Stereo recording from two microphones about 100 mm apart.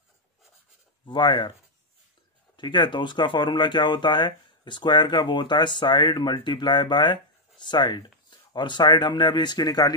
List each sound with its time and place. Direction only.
1.0 s speech: 55° left (ahead or behind)
2.5 s speech: 50° left (ahead or behind)